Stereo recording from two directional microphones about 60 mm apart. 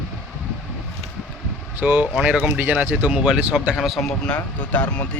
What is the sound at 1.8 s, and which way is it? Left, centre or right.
Speech, right.